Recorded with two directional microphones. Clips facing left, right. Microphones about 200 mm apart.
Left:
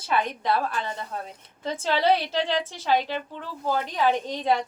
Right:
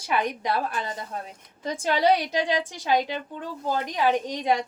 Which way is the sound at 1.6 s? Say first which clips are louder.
Right 1 dB; 15° right (ahead or behind).